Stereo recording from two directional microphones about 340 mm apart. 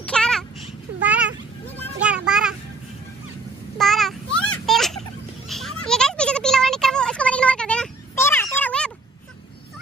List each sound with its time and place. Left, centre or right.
0.0 s babbling: centre
1.0 s children playing: centre
1.8 s child singing: centre
3.7 s a sound: centre